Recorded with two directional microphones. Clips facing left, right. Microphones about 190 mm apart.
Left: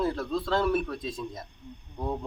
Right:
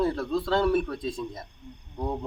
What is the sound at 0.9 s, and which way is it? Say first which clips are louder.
Speech: right 3 dB; 30° right (ahead or behind).